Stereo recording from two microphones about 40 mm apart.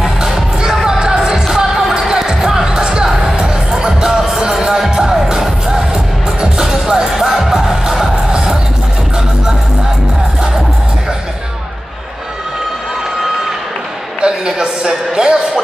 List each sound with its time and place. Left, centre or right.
0.0 s music: centre
3.1 s music: centre
14.2 s music: centre